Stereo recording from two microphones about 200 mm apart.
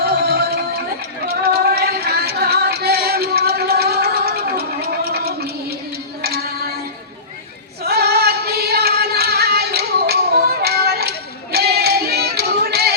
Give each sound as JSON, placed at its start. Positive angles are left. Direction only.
{"t": 0.0, "sound": "a sound", "side_deg": -50}
{"t": 1.3, "sound": "music", "side_deg": -50}
{"t": 5.1, "sound": "a sound", "side_deg": -50}
{"t": 6.2, "sound": "music", "side_deg": -50}
{"t": 7.9, "sound": "female singing", "side_deg": -50}
{"t": 10.6, "sound": "music", "side_deg": -50}